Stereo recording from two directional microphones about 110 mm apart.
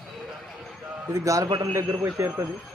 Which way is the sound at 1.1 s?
30° right (ahead or behind).